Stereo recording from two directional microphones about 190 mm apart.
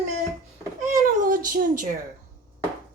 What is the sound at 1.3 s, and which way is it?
Speech, 45° right (ahead or behind).